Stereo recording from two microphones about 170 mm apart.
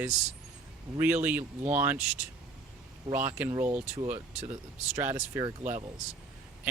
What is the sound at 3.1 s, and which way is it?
Speech, 10° right (ahead or behind).